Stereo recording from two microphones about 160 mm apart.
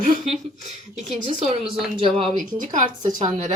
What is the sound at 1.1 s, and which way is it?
Speech, 40° right (ahead or behind).